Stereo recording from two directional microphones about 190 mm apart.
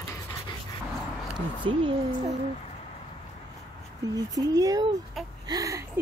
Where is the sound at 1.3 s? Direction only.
25° right (ahead or behind).